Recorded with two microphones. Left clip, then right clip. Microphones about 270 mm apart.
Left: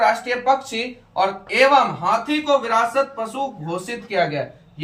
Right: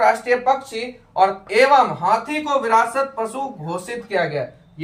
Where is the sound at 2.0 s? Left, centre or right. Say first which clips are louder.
Right 1 dB; centre.